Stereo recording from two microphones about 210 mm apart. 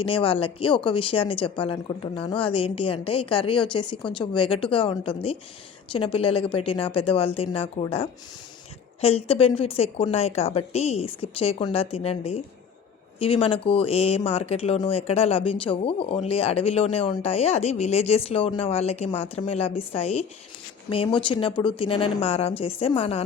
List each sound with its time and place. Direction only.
0.0 s speech: 25° left (ahead or behind)